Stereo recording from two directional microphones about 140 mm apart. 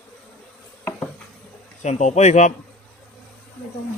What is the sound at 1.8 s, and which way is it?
Speech, 55° left (ahead or behind).